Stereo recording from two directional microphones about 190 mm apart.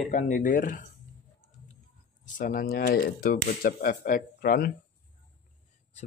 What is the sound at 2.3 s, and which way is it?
Speech, 45° left (ahead or behind).